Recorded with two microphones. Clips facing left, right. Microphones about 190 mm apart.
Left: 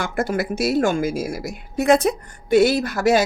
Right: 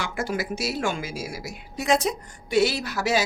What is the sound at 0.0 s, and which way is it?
A woman's voice, 55° left (ahead or behind).